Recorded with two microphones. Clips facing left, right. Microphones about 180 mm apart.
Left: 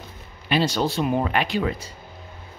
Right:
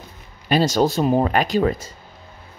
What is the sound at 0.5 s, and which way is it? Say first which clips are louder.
Speech: right 4 dB; 40° right (ahead or behind).